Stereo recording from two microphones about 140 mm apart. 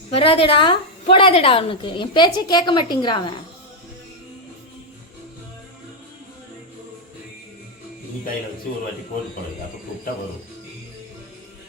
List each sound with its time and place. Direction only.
0.1 s a woman's voice: 40° left (ahead or behind)